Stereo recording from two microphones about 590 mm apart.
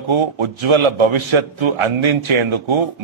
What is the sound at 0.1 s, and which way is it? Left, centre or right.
A man's voice, right.